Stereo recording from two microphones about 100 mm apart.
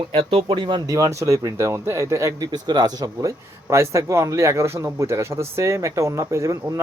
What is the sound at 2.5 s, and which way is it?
Speech, 45° right (ahead or behind).